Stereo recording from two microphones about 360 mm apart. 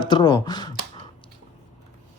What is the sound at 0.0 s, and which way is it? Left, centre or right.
Speech, centre.